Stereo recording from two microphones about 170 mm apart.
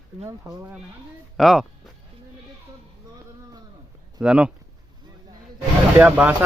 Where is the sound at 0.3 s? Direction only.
10° right (ahead or behind).